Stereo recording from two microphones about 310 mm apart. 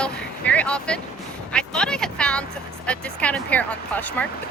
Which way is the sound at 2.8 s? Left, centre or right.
Centre.